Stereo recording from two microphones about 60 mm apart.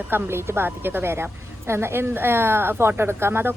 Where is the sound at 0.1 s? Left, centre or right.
Right.